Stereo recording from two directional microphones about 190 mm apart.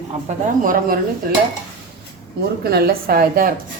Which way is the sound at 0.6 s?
45° right (ahead or behind).